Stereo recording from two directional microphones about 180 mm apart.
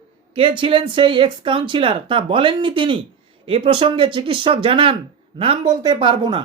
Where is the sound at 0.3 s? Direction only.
30° right (ahead or behind).